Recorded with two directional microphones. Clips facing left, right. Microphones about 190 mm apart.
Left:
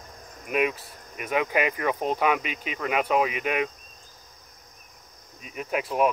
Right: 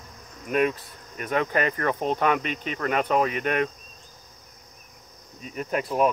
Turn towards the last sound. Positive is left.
turn(degrees=5)  # may be behind; listen again after turning